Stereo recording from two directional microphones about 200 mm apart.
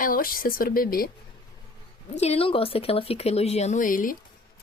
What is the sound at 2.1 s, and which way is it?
Speech, 30° left (ahead or behind).